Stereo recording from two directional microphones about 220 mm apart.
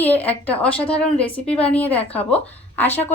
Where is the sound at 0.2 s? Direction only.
5° left (ahead or behind).